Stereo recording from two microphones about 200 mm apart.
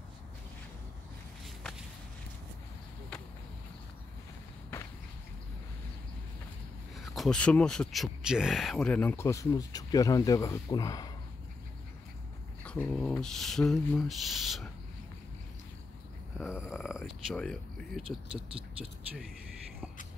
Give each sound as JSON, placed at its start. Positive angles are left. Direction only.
{"t": 1.4, "sound": "walk", "side_deg": 0}
{"t": 7.2, "sound": "speech", "side_deg": 5}
{"t": 12.8, "sound": "speech", "side_deg": 5}
{"t": 16.3, "sound": "speech", "side_deg": -5}
{"t": 18.0, "sound": "speech", "side_deg": -25}